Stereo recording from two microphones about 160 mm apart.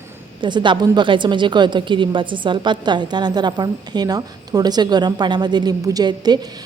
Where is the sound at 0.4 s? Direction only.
30° right (ahead or behind).